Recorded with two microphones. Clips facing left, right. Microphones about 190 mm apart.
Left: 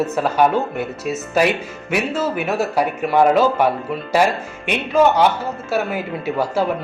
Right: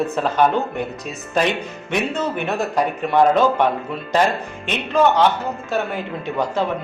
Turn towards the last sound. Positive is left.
turn(degrees=10)  # may be behind; listen again after turning